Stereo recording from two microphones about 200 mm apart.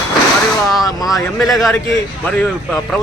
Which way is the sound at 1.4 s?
Centre (ahead or behind).